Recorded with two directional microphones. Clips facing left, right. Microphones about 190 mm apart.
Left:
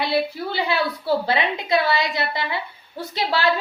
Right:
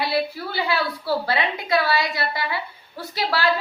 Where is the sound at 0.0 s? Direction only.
20° left (ahead or behind).